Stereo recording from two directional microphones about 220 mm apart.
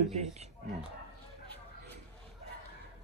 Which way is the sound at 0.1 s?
30° right (ahead or behind).